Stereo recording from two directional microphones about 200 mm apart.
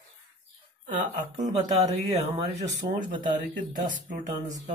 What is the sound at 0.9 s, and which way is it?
Speech, 40° right (ahead or behind).